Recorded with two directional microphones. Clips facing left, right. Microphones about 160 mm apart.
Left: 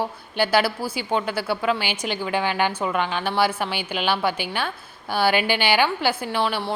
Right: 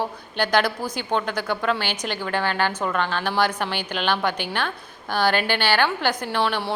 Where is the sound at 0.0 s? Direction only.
10° left (ahead or behind).